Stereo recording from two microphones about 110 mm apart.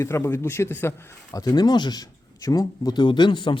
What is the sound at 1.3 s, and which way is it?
Speech, 35° left (ahead or behind).